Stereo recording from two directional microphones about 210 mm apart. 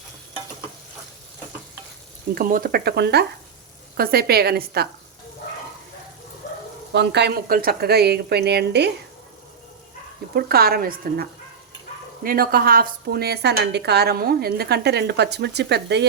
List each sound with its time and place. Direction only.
2.3 s a woman's voice: 40° right (ahead or behind)
6.9 s a woman's voice: 55° right (ahead or behind)
10.3 s a woman's voice: 45° right (ahead or behind)